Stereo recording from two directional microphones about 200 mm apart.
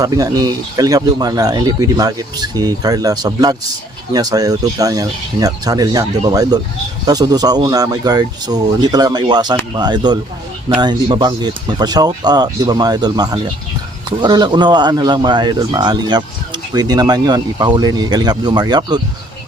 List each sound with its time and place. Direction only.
0.0 s speech: 20° right (ahead or behind)